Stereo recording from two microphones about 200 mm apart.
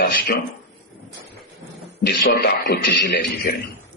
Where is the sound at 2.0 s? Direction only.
50° left (ahead or behind).